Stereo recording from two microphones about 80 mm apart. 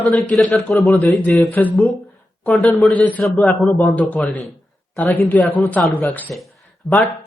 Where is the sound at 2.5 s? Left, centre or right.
Centre.